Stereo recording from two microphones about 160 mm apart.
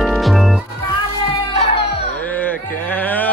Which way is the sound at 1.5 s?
40° left (ahead or behind).